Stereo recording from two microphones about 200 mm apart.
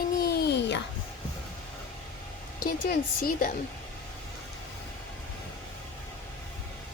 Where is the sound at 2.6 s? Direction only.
45° left (ahead or behind).